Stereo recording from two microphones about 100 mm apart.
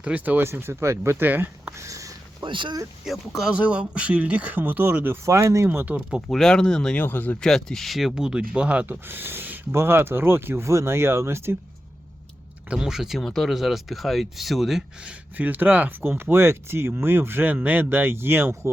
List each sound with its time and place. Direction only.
0.0 s speech: 15° right (ahead or behind)
1.8 s a sound: 35° right (ahead or behind)
2.4 s speech: 55° right (ahead or behind)
3.0 s speech: 5° right (ahead or behind); by 5.1 s 20° right (ahead or behind)
5.2 s speech: 30° right (ahead or behind)
6.1 s speech: 5° right (ahead or behind)
6.3 s speech: 5° left (ahead or behind)
7.0 s speech: 20° left (ahead or behind)
7.4 s speech: 5° left (ahead or behind); by 11.5 s 25° right (ahead or behind)
12.7 s speech: 5° right (ahead or behind)
15.4 s speech: 15° right (ahead or behind)